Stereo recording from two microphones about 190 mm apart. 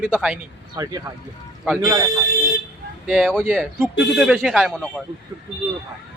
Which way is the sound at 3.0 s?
Centre (ahead or behind).